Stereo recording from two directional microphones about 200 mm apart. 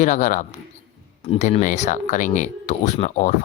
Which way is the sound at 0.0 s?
35° left (ahead or behind).